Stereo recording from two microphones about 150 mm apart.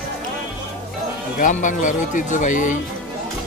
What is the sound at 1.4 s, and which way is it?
Speech, 60° left (ahead or behind).